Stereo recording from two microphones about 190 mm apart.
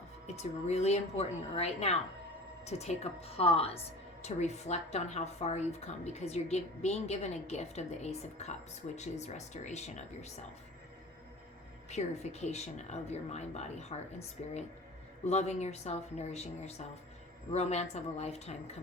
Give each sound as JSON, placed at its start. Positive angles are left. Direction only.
{"t": 0.3, "sound": "speech", "side_deg": 35}
{"t": 11.9, "sound": "speech", "side_deg": 35}